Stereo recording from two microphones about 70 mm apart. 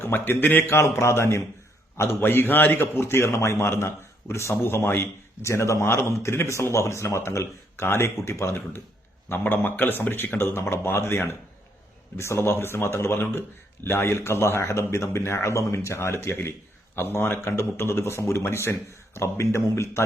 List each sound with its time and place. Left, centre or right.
0.0 s speech: left
9.3 s speech: left